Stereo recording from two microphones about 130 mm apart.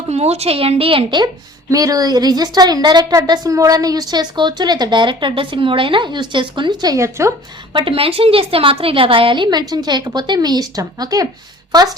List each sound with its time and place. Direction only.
0.1 s a woman's voice: 55° right (ahead or behind)
1.7 s a woman's voice: 30° right (ahead or behind)
7.7 s a woman's voice: 40° right (ahead or behind)